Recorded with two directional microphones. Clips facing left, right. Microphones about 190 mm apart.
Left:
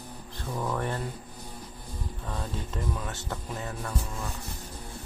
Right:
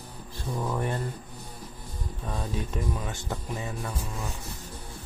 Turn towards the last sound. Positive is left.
turn(degrees=-10)  # may be behind; listen again after turning